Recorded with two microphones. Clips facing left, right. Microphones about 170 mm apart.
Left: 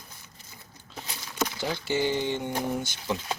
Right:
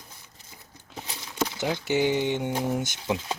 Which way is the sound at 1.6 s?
15° right (ahead or behind).